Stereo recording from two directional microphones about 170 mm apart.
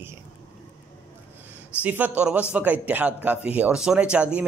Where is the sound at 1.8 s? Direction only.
10° right (ahead or behind).